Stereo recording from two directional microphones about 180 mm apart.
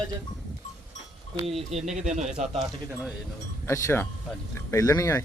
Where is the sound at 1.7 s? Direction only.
35° right (ahead or behind).